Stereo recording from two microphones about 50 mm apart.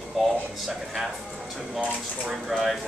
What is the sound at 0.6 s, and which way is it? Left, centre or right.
Speech, centre.